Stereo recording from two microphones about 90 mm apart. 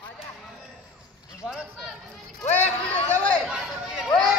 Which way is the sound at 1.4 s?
5° right (ahead or behind).